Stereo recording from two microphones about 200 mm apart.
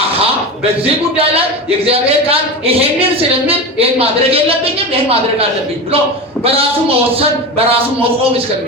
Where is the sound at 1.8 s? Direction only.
30° right (ahead or behind).